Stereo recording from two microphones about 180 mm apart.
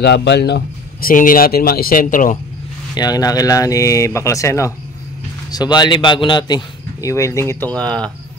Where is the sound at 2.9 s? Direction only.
20° left (ahead or behind); by 8.1 s 5° left (ahead or behind).